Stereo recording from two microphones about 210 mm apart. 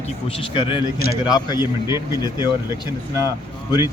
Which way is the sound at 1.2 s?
20° left (ahead or behind).